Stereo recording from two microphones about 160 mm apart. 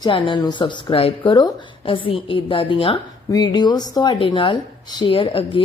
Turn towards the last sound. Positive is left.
turn(degrees=35)  # may be behind; listen again after turning